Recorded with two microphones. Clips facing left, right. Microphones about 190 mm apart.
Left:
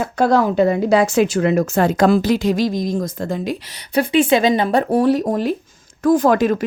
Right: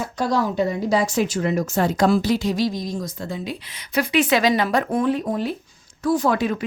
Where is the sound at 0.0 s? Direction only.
55° left (ahead or behind).